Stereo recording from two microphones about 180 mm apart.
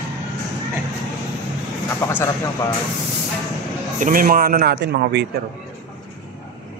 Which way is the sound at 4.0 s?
50° right (ahead or behind).